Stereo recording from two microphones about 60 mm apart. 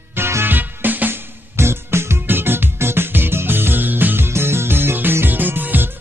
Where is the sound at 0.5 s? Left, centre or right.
Right.